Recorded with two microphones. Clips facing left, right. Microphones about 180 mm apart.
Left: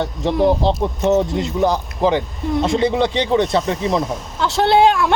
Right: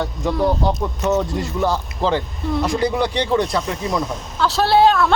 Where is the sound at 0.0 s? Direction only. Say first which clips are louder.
Left 3 dB; 25° left (ahead or behind).